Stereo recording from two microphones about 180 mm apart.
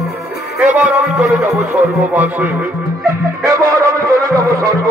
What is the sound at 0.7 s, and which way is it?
Music, 10° right (ahead or behind).